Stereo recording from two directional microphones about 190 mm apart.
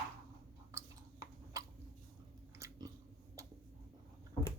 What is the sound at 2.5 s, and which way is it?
Biting, 15° right (ahead or behind).